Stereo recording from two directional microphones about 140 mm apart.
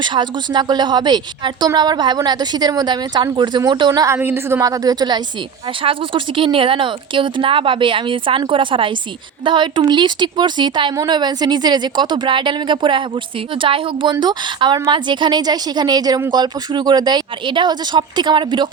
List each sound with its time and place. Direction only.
0.0 s a woman's voice: 35° right (ahead or behind)